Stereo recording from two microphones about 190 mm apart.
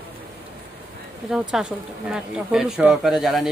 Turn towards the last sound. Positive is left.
turn(degrees=0)  # may be behind; listen again after turning